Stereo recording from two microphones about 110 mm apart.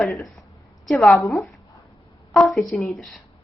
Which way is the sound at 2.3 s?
5° left (ahead or behind).